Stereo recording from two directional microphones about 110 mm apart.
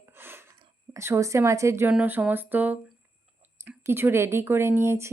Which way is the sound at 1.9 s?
15° right (ahead or behind).